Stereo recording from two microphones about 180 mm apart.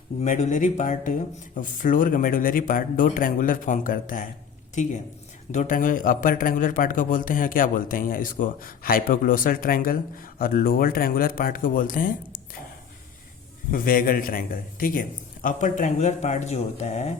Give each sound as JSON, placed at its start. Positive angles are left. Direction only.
{"t": 0.2, "sound": "speech", "side_deg": 40}
{"t": 5.5, "sound": "speech", "side_deg": 45}
{"t": 13.7, "sound": "speech", "side_deg": 50}